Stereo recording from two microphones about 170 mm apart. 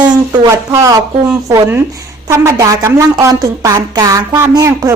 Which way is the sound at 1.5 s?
20° right (ahead or behind).